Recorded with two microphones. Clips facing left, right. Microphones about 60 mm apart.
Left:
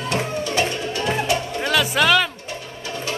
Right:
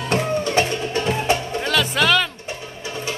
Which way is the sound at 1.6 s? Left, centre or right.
Centre.